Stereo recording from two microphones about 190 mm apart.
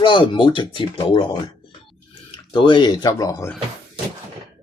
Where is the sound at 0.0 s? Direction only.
25° left (ahead or behind).